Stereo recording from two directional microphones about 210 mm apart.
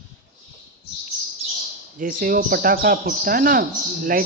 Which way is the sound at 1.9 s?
40° right (ahead or behind).